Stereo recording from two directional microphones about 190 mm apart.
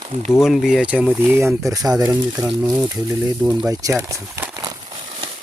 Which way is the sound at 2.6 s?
10° right (ahead or behind).